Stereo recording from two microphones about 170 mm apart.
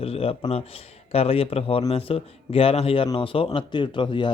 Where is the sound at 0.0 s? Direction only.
35° left (ahead or behind).